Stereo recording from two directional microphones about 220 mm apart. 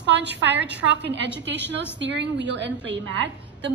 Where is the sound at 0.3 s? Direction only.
50° right (ahead or behind).